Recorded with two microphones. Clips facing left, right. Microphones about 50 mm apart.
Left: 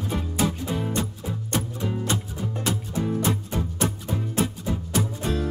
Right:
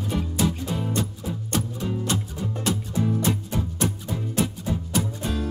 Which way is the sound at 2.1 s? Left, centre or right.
Centre.